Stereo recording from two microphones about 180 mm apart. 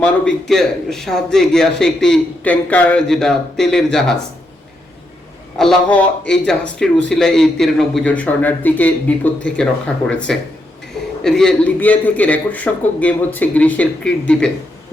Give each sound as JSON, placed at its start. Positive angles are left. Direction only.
{"t": 0.0, "sound": "a man's voice", "side_deg": 5}
{"t": 5.5, "sound": "a man's voice", "side_deg": 5}